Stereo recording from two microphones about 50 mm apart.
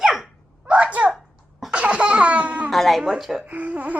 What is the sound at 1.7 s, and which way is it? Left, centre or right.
Laughter, right.